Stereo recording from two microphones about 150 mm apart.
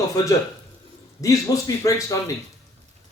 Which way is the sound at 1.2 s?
20° left (ahead or behind).